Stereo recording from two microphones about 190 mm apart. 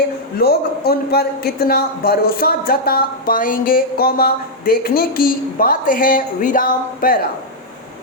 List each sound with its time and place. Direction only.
0.3 s a man's voice: 55° left (ahead or behind)